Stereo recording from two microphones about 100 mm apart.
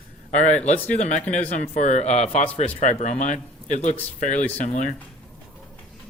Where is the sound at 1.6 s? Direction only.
90° left.